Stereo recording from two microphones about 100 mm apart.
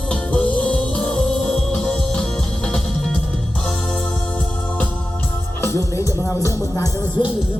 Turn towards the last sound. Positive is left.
turn(degrees=45)  # may be behind; listen again after turning